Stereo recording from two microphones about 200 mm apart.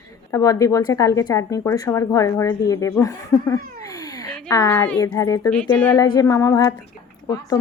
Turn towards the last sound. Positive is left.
turn(degrees=20)  # may be behind; listen again after turning